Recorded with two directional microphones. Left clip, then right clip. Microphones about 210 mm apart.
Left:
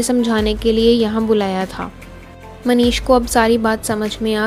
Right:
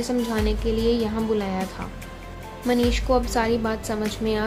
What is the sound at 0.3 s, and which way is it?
A woman's voice, 35° left (ahead or behind).